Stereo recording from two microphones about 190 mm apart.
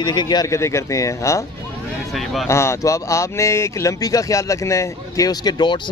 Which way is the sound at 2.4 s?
15° left (ahead or behind).